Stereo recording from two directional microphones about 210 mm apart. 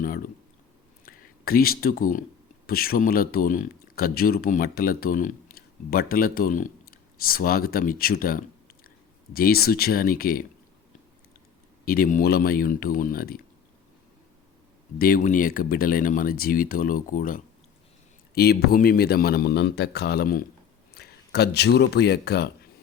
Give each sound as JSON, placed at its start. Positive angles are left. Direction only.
{"t": 1.0, "sound": "a man's voice", "side_deg": 45}
{"t": 11.9, "sound": "a man's voice", "side_deg": 40}
{"t": 14.9, "sound": "a man's voice", "side_deg": 45}